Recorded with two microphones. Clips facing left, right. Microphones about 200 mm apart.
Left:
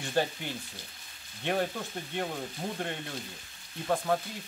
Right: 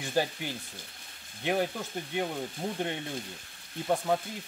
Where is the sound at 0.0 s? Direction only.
10° right (ahead or behind).